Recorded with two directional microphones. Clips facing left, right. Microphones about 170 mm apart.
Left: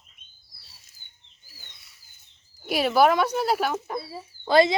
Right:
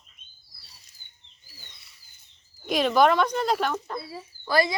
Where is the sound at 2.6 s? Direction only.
5° left (ahead or behind).